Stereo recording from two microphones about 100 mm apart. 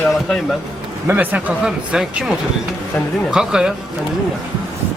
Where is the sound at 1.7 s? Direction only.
5° right (ahead or behind).